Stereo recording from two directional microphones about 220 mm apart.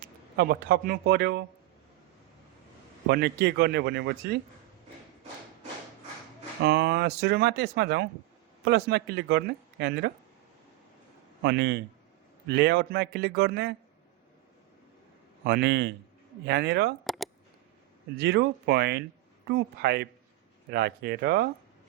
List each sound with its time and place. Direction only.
0.3 s speech: 45° right (ahead or behind)
3.1 s speech: 50° right (ahead or behind)
6.7 s speech: 45° right (ahead or behind)
11.4 s speech: 50° right (ahead or behind)
15.4 s speech: 45° right (ahead or behind)
17.0 s a sound: centre (ahead or behind)
18.2 s speech: 50° right (ahead or behind)